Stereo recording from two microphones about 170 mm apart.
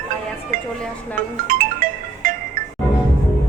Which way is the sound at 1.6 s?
55° right (ahead or behind).